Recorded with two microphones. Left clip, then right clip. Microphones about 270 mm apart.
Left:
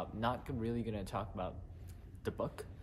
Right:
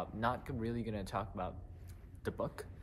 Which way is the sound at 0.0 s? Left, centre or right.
Centre.